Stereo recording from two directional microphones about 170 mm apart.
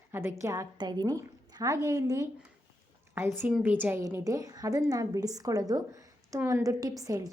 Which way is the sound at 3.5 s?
10° right (ahead or behind).